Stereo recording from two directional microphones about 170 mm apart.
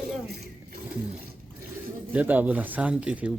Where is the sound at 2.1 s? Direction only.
10° right (ahead or behind).